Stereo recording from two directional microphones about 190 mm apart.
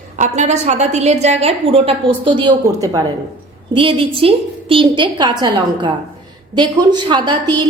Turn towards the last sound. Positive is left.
turn(degrees=-25)  # may be behind; listen again after turning